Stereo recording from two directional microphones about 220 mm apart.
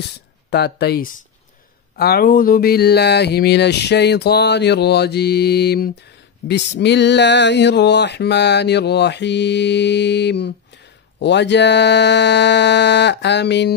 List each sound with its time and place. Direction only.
0.5 s speech: 45° left (ahead or behind)